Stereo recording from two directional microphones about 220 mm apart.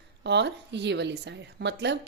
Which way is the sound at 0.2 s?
50° right (ahead or behind).